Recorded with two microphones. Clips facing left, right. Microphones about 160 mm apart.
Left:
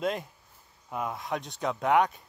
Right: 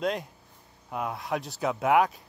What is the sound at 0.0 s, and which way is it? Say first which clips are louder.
Speech: right 1 dB; centre (ahead or behind).